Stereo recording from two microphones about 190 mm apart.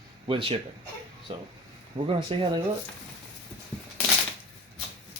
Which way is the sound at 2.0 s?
30° right (ahead or behind).